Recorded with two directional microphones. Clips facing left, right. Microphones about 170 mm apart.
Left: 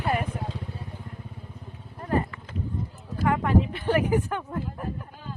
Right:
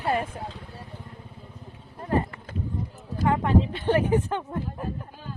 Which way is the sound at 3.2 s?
25° right (ahead or behind).